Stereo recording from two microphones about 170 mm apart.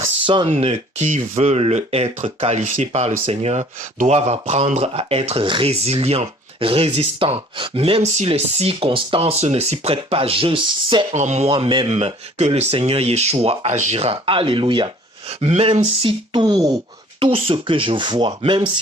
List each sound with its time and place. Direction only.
0.3 s speech: 30° right (ahead or behind)
11.1 s speech: 40° right (ahead or behind)